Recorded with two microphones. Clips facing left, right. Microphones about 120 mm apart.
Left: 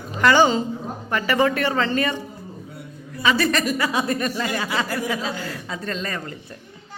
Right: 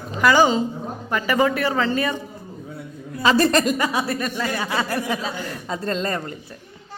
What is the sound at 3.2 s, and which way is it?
Speech, 35° right (ahead or behind).